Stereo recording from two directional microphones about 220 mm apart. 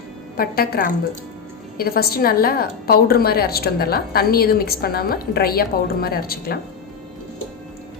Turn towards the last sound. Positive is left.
turn(degrees=45)  # may be behind; listen again after turning